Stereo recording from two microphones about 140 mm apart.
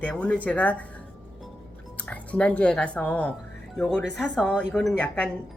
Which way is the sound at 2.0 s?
10° left (ahead or behind).